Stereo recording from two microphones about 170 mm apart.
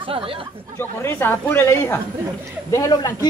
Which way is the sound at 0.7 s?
15° left (ahead or behind).